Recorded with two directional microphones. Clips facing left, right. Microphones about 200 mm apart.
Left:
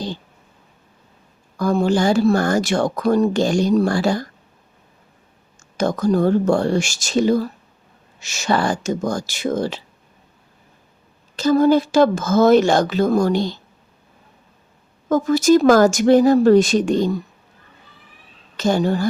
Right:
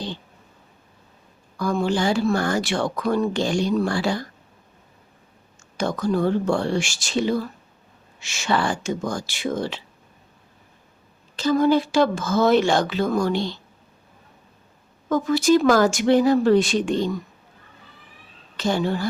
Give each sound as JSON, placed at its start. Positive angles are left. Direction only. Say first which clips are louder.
{"t": 1.5, "sound": "a woman's voice", "louder": "left 5 dB", "side_deg": 45}
{"t": 5.7, "sound": "a woman's voice", "louder": "left 5 dB", "side_deg": 45}
{"t": 11.3, "sound": "a woman's voice", "louder": "left 4 dB", "side_deg": 40}
{"t": 15.1, "sound": "a woman's voice", "louder": "left 4 dB", "side_deg": 45}
{"t": 18.5, "sound": "a woman's voice", "louder": "left 4 dB", "side_deg": 45}